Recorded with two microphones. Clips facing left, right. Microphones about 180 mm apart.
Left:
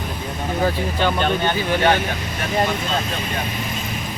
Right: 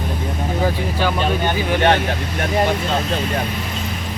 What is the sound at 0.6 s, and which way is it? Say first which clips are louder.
Speech: even; 5° right (ahead or behind).